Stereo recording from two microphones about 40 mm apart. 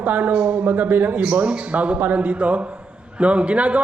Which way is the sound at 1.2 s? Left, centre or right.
Right.